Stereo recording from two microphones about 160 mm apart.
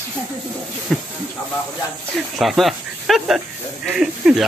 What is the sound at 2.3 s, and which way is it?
Speech, centre (ahead or behind).